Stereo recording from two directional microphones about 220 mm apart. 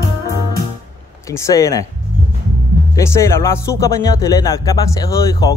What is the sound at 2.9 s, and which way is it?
Speech, 15° left (ahead or behind).